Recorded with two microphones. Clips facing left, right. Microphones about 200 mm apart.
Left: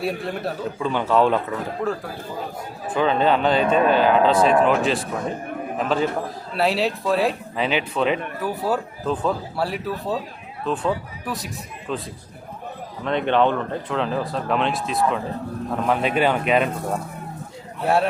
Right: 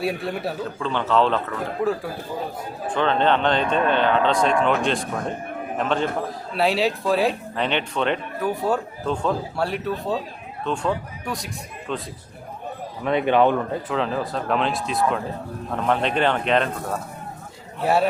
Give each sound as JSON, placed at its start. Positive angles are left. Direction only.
{"t": 0.0, "sound": "speech", "side_deg": 0}
{"t": 0.8, "sound": "speech", "side_deg": 10}
{"t": 2.8, "sound": "a man's voice", "side_deg": 5}
{"t": 13.1, "sound": "speech", "side_deg": -10}
{"t": 17.8, "sound": "speech", "side_deg": 0}